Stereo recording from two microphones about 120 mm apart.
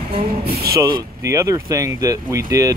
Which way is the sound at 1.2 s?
25° right (ahead or behind).